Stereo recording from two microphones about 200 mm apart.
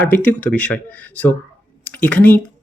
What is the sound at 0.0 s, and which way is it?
Speech, 10° left (ahead or behind).